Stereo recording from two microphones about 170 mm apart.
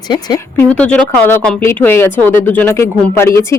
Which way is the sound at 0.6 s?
10° left (ahead or behind).